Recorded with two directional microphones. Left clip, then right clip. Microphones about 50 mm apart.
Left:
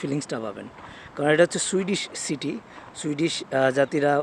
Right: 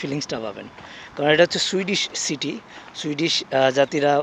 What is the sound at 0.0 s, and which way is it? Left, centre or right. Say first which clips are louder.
Speech: right 2 dB; left.